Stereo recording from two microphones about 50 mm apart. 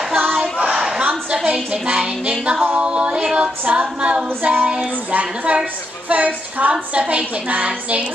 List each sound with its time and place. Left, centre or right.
0.1 s a sound: right; by 2.3 s centre
2.4 s female singing: right
6.0 s a woman's voice: right
7.0 s female singing: right